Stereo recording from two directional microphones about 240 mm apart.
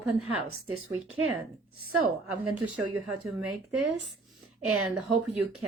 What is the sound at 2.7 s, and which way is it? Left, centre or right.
Speech, centre.